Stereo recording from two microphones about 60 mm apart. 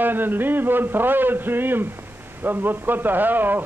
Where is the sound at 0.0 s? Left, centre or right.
Right.